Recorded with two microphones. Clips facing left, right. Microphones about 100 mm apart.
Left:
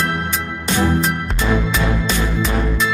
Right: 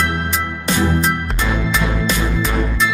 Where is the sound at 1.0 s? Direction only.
Centre (ahead or behind).